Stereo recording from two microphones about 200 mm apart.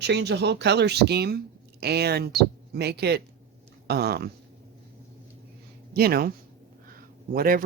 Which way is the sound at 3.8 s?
50° right (ahead or behind).